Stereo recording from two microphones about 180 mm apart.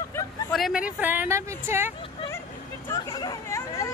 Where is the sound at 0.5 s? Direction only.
Centre (ahead or behind).